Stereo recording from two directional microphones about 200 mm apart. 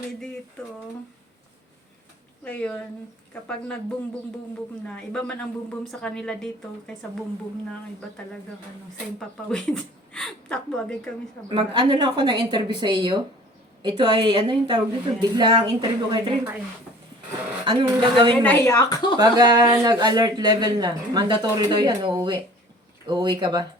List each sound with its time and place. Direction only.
2.4 s a woman's voice: 5° left (ahead or behind)
9.1 s a woman's voice: 5° left (ahead or behind)
11.4 s speech: 25° right (ahead or behind)
17.7 s speech: 25° right (ahead or behind)
18.4 s speech: 10° left (ahead or behind)
19.2 s speech: 20° right (ahead or behind)